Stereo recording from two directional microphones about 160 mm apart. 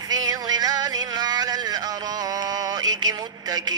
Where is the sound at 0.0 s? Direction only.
25° right (ahead or behind).